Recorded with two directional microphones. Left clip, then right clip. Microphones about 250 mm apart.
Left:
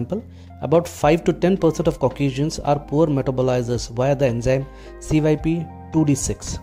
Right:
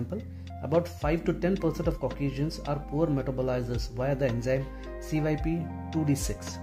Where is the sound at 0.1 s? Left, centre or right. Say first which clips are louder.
Left 10 dB; left.